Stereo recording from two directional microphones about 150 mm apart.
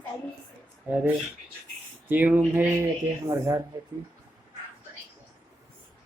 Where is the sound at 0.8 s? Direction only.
10° right (ahead or behind).